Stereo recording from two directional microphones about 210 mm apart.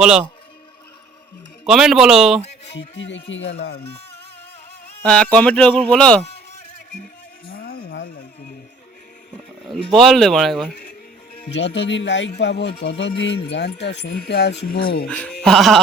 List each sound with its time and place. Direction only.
0.0 s speech: 5° right (ahead or behind)
1.6 s speech: centre (ahead or behind)
2.7 s speech: 60° left (ahead or behind)
5.0 s speech: 5° left (ahead or behind)
7.5 s music: 45° left (ahead or behind)
9.9 s speech: centre (ahead or behind)
11.5 s speech: 55° left (ahead or behind)
15.0 s speech: 5° left (ahead or behind)